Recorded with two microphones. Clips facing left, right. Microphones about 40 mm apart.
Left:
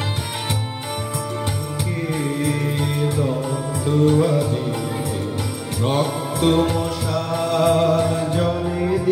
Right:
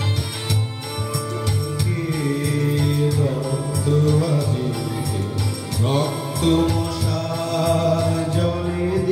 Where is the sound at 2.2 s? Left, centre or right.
Centre.